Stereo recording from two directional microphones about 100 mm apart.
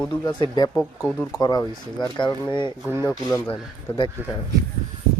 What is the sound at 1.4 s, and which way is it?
Speech, 40° left (ahead or behind).